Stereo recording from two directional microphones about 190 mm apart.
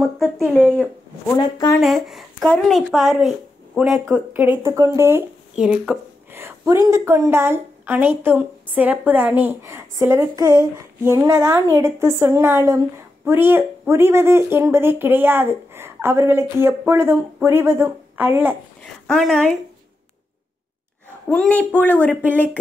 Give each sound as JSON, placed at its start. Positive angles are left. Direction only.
{"t": 1.3, "sound": "speech", "side_deg": 20}
{"t": 1.7, "sound": "speech", "side_deg": 0}
{"t": 4.0, "sound": "speech", "side_deg": -15}
{"t": 19.0, "sound": "speech", "side_deg": 0}
{"t": 21.3, "sound": "a woman's voice", "side_deg": 5}